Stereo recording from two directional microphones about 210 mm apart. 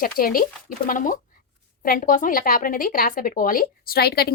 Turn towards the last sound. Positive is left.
turn(degrees=50)  # may be behind; listen again after turning